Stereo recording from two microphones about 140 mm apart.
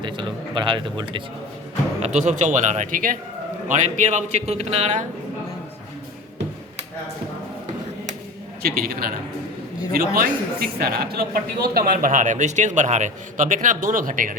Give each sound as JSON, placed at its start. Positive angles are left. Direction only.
{"t": 0.0, "sound": "a man's voice", "side_deg": -35}
{"t": 2.0, "sound": "speech", "side_deg": -55}
{"t": 3.7, "sound": "a man's voice", "side_deg": -60}
{"t": 8.6, "sound": "a man's voice", "side_deg": -90}